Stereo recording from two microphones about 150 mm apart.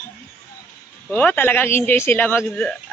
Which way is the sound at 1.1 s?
10° left (ahead or behind).